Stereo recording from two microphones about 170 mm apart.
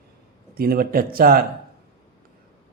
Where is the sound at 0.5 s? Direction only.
60° right (ahead or behind).